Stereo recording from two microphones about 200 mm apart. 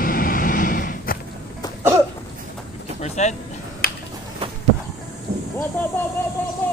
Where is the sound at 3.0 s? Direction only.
35° left (ahead or behind).